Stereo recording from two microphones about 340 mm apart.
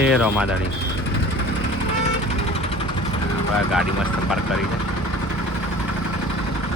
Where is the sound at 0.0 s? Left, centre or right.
Centre.